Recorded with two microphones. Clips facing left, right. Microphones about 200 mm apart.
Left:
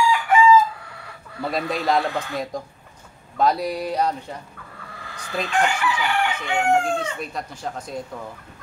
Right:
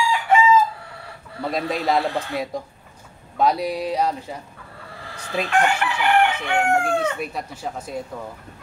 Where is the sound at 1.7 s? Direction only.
Centre (ahead or behind).